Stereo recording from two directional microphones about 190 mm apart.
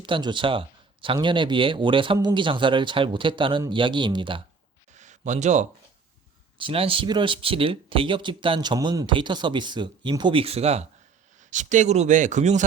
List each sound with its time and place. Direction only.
0.0 s speech: 25° right (ahead or behind)
4.9 s a sound: 40° right (ahead or behind)
6.6 s speech: 30° right (ahead or behind)